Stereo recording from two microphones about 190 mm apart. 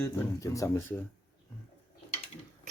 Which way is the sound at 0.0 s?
15° left (ahead or behind).